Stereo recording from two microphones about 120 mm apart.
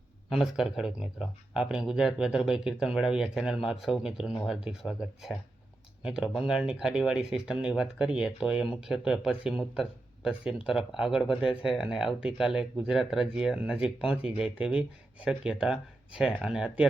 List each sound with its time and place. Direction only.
0.3 s speech: centre (ahead or behind)